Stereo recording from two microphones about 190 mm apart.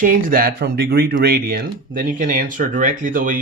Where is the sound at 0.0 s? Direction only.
45° right (ahead or behind).